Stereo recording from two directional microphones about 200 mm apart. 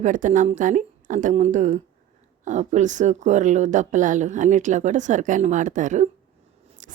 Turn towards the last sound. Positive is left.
turn(degrees=-40)  # may be behind; listen again after turning